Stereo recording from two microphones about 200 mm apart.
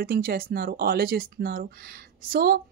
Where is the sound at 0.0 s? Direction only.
50° right (ahead or behind).